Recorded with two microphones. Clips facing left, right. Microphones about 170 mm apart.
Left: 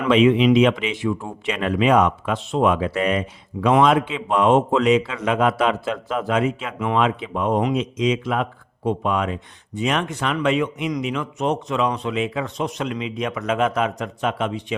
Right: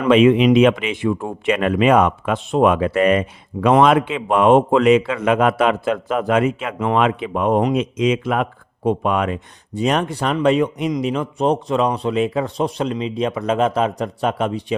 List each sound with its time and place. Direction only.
0.1 s speech: 50° right (ahead or behind)
9.7 s speech: 40° right (ahead or behind)